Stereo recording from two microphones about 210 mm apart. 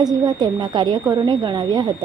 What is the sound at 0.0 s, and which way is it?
Speech, 20° right (ahead or behind).